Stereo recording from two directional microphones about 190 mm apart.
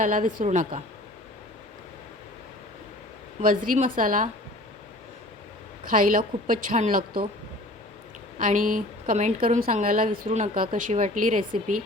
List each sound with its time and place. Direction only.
0.0 s a woman's voice: 45° right (ahead or behind)
3.4 s a woman's voice: 45° right (ahead or behind)
5.8 s a woman's voice: 45° right (ahead or behind)
8.4 s a woman's voice: 45° right (ahead or behind)
10.2 s a woman's voice: 35° right (ahead or behind)